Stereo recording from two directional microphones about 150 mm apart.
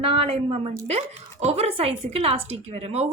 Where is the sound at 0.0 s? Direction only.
40° right (ahead or behind).